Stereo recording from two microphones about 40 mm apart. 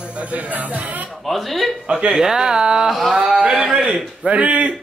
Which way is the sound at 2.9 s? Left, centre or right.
Centre.